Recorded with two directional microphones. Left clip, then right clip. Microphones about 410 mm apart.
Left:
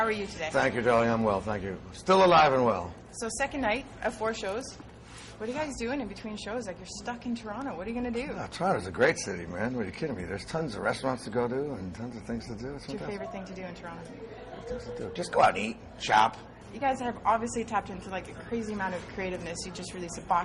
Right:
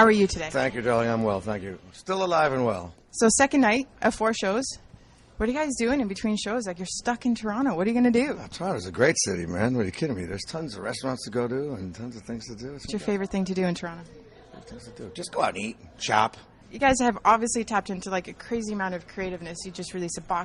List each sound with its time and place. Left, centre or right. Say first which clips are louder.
0.0 s speech: right 10 dB; right
0.5 s speech: left 4 dB; centre
3.2 s a woman's voice: right 11 dB; right
5.4 s a woman's voice: right 7 dB; right
8.4 s speech: left 2 dB; centre
12.9 s speech: right 9 dB; right
15.1 s speech: left 3 dB; centre
16.8 s a woman's voice: right 7 dB; right